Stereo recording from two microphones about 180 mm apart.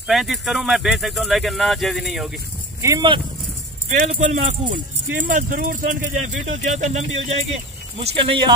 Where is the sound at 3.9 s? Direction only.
40° right (ahead or behind).